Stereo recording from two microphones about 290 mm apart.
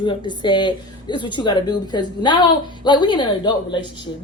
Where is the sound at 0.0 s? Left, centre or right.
Centre.